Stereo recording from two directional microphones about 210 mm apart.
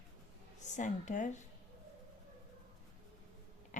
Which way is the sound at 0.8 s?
35° left (ahead or behind).